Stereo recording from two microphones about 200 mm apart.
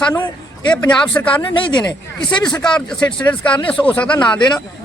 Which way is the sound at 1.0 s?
5° left (ahead or behind).